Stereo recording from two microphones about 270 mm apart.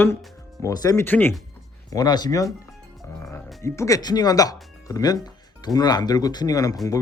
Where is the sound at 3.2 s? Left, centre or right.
Centre.